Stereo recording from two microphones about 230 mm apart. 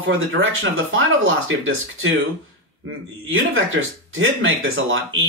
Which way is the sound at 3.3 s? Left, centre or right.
Right.